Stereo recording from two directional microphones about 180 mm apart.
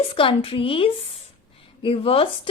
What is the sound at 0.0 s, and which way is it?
A woman's voice, 30° left (ahead or behind).